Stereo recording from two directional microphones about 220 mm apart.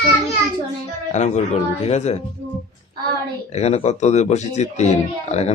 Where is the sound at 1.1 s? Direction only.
30° left (ahead or behind).